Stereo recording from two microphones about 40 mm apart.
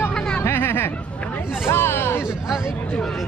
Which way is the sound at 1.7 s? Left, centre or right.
Left.